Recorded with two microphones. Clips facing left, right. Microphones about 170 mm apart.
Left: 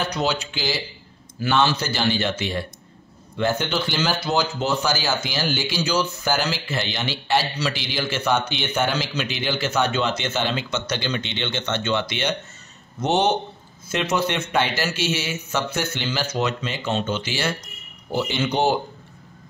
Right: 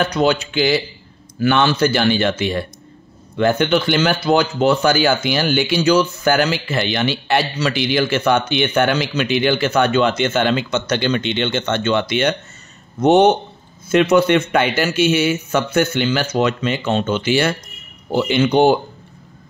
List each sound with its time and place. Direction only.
0.0 s speech: 60° right (ahead or behind)